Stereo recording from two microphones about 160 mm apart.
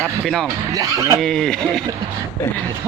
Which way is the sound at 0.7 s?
20° right (ahead or behind).